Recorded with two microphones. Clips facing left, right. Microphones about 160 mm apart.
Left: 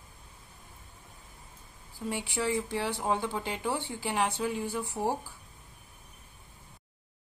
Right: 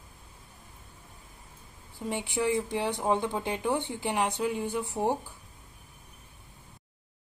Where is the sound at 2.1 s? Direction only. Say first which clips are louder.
Right 3 dB; 20° right (ahead or behind).